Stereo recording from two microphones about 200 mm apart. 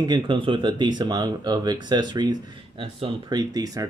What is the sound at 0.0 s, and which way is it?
Speech, 25° right (ahead or behind).